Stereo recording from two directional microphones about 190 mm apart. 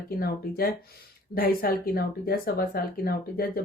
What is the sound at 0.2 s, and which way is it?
A woman's voice, 55° left (ahead or behind).